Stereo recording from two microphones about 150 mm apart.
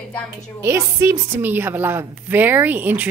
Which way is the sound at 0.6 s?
15° right (ahead or behind).